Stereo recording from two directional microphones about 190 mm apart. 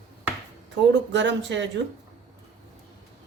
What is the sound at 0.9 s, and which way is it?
Speech, 70° right (ahead or behind).